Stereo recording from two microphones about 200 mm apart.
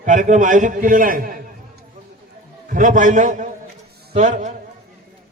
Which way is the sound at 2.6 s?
40° right (ahead or behind).